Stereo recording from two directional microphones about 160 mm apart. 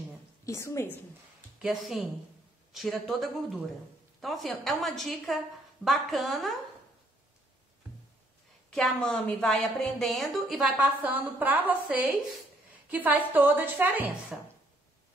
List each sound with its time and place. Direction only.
0.5 s a woman's voice: 20° left (ahead or behind)
1.6 s a woman's voice: centre (ahead or behind)
8.6 s a woman's voice: 5° left (ahead or behind)